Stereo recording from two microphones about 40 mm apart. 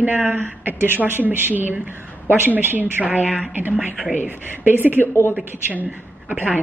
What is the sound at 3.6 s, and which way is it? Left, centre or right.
A woman's voice, right.